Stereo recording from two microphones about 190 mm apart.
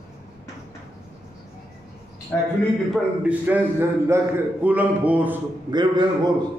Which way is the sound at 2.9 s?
5° right (ahead or behind).